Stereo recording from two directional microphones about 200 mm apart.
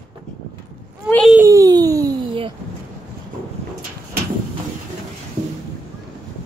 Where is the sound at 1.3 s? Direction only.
15° right (ahead or behind).